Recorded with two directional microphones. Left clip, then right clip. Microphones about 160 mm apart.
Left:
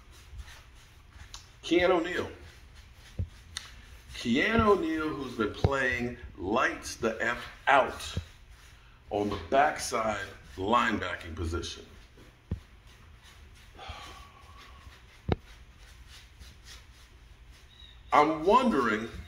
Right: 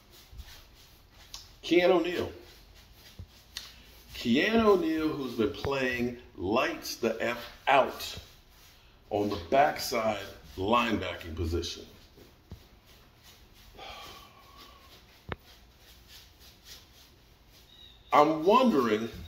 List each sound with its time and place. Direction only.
1.3 s a sound: 10° left (ahead or behind)
4.1 s speech: 15° left (ahead or behind)
9.1 s speech: 10° left (ahead or behind)
18.1 s speech: 15° left (ahead or behind)